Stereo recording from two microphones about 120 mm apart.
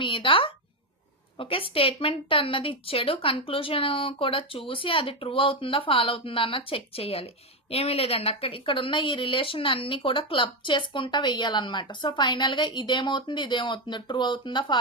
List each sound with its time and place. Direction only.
0.0 s a woman's voice: 45° left (ahead or behind)